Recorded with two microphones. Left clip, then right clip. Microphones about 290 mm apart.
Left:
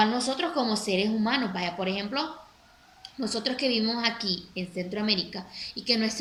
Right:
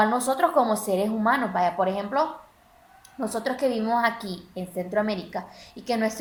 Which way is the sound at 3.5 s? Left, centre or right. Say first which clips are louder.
Right 2 dB; centre.